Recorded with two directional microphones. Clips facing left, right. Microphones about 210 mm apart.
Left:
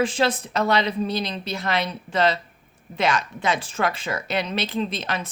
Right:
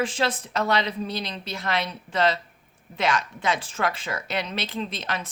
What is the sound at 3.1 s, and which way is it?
Speech, 30° left (ahead or behind).